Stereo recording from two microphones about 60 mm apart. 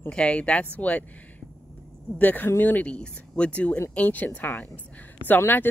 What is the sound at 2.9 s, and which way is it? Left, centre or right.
A woman's voice, centre.